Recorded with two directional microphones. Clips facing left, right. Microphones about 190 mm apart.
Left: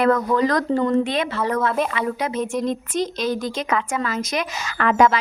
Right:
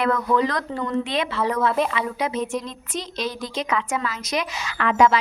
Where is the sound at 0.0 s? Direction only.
45° left (ahead or behind).